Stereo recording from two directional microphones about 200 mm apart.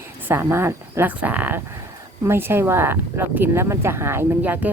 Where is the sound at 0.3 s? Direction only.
10° right (ahead or behind).